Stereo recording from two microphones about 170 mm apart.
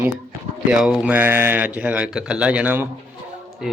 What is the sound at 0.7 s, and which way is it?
Speech, 5° right (ahead or behind).